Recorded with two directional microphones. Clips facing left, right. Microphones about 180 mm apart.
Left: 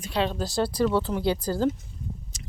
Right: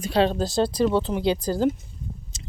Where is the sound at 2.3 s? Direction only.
25° right (ahead or behind).